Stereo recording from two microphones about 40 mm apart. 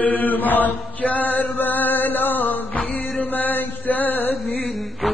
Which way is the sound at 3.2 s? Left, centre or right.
Left.